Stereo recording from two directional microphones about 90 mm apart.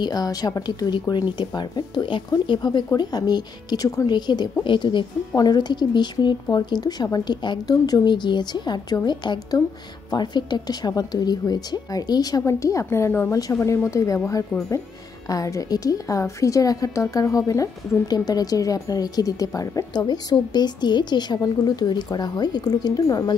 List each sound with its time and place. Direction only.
0.0 s a woman's voice: 45° left (ahead or behind)
2.9 s a woman's voice: 45° left (ahead or behind)